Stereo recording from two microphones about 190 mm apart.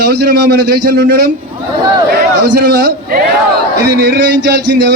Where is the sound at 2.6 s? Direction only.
60° right (ahead or behind).